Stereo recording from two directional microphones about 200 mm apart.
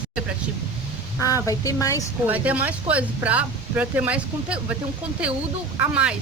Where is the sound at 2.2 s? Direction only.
10° right (ahead or behind).